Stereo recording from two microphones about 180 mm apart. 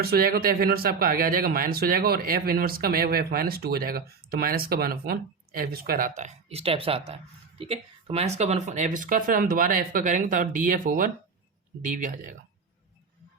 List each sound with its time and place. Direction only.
0.0 s speech: 55° right (ahead or behind)